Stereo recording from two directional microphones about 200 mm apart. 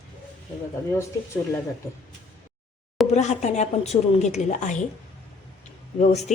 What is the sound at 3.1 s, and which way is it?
A woman's voice, 35° left (ahead or behind).